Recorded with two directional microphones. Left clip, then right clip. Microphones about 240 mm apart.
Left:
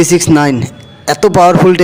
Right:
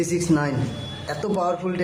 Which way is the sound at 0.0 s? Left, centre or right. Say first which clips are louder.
Left 14 dB; left.